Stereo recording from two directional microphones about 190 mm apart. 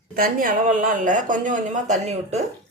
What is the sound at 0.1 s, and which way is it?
Speech, 50° right (ahead or behind).